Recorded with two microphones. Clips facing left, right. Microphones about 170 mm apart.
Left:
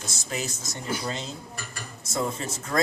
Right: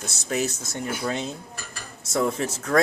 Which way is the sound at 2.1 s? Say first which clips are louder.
Right 5 dB; 70° right (ahead or behind).